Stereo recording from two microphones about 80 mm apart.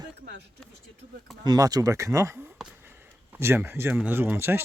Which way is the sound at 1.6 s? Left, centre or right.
Right.